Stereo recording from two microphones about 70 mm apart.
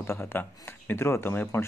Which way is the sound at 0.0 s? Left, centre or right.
Left.